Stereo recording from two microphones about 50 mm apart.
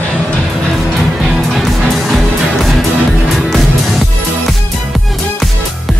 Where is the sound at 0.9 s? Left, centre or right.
Centre.